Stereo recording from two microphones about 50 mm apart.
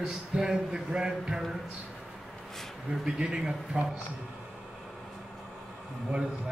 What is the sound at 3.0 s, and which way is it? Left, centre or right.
Speech, centre.